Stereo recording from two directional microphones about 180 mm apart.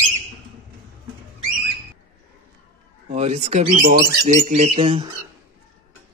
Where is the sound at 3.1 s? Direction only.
40° right (ahead or behind).